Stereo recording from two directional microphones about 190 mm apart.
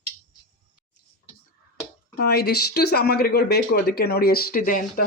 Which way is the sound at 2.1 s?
55° left (ahead or behind).